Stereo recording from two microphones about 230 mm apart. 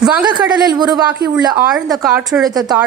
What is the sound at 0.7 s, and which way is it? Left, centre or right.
Speech, centre.